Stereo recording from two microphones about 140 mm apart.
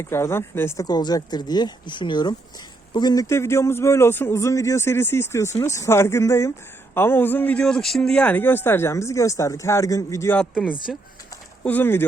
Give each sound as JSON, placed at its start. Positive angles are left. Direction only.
{"t": 0.0, "sound": "speech", "side_deg": 20}
{"t": 0.9, "sound": "speech", "side_deg": 30}
{"t": 10.3, "sound": "speech", "side_deg": 5}
{"t": 11.6, "sound": "speech", "side_deg": 15}